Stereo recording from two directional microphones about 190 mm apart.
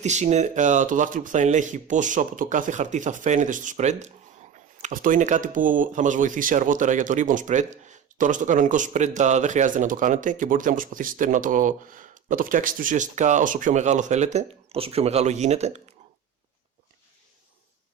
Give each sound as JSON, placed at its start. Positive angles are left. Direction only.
{"t": 0.0, "sound": "speech", "side_deg": -35}